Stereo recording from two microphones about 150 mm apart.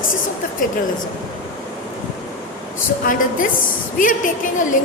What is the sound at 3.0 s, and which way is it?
Speech, 65° left (ahead or behind).